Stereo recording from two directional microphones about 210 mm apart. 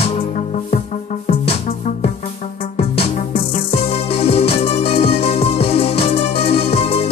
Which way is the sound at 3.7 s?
30° left (ahead or behind).